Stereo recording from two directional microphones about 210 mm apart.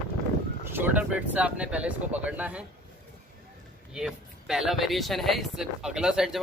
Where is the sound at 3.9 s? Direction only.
5° right (ahead or behind).